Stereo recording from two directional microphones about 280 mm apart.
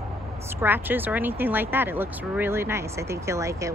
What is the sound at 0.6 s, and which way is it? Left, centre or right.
Speech, centre.